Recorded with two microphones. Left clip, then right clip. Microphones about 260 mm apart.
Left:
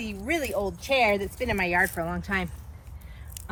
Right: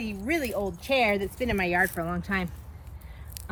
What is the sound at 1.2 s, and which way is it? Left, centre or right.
Speech, centre.